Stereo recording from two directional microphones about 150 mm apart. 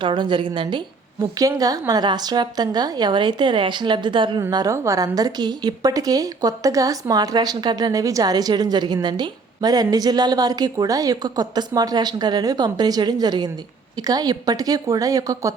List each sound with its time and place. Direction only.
0.0 s a woman's voice: 35° right (ahead or behind)
4.5 s a woman's voice: 20° right (ahead or behind)